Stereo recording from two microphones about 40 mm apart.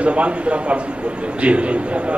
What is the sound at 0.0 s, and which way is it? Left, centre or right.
A man's voice, right.